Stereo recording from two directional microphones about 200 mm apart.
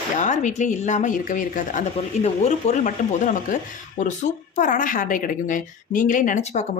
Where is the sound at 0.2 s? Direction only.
35° left (ahead or behind).